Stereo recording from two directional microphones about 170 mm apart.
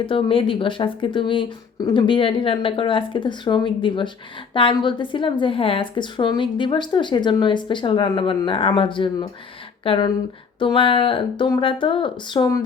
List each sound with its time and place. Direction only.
0.0 s a woman's voice: 30° left (ahead or behind)